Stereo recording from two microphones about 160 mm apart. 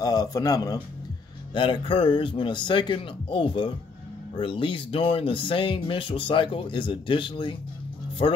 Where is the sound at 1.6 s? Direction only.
35° left (ahead or behind).